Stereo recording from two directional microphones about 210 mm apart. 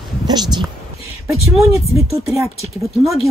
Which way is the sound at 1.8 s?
30° left (ahead or behind).